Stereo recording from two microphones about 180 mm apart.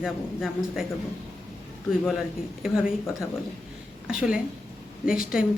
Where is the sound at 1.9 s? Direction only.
5° right (ahead or behind).